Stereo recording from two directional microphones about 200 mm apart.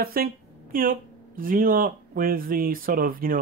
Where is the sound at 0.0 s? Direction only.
50° right (ahead or behind).